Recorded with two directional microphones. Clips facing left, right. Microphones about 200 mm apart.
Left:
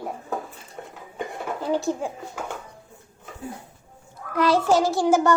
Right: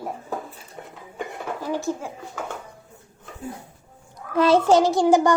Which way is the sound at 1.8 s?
15° left (ahead or behind).